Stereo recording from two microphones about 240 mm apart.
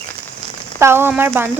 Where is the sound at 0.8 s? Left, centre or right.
Centre.